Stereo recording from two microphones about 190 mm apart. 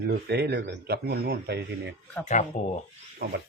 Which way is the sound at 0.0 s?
60° right (ahead or behind).